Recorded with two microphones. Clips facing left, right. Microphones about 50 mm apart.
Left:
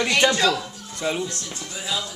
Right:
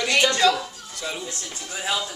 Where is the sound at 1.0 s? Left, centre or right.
Centre.